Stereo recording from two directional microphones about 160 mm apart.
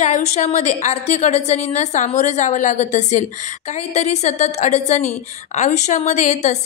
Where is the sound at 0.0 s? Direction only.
45° left (ahead or behind).